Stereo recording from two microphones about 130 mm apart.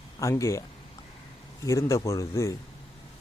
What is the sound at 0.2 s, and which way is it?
Speech, 25° left (ahead or behind).